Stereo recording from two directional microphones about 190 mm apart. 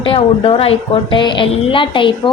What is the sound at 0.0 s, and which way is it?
A woman's voice, 30° left (ahead or behind).